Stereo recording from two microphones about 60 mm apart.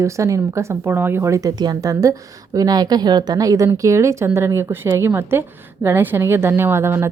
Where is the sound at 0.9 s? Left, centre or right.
Right.